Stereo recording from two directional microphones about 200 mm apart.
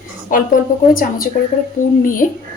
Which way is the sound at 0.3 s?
45° left (ahead or behind).